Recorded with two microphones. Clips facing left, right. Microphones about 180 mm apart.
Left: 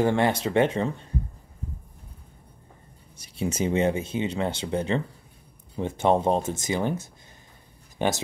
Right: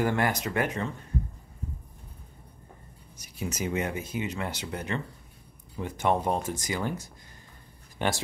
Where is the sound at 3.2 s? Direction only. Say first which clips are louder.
Left 6 dB; 30° left (ahead or behind).